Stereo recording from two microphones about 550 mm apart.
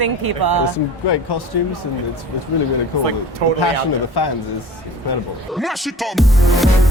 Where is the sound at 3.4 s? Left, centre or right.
Right.